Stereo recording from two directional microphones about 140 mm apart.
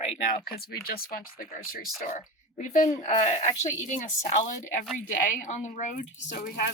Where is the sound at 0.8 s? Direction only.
90° left.